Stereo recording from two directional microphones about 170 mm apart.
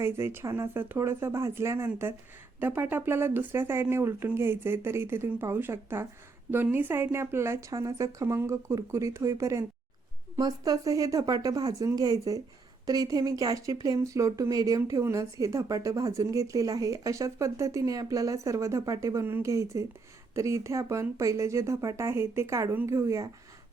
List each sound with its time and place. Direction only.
0.0 s speech: 15° right (ahead or behind)